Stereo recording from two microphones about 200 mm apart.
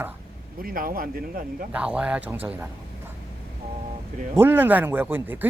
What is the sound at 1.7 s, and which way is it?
Speech, 5° right (ahead or behind).